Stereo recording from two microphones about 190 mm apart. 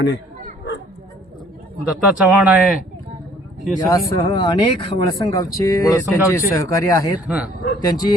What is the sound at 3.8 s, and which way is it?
Speech, 15° left (ahead or behind).